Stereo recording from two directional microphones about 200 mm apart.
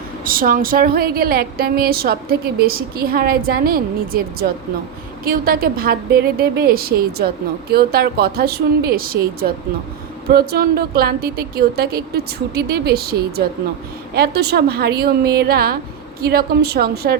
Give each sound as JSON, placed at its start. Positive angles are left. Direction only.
{"t": 0.3, "sound": "a woman's voice", "side_deg": -45}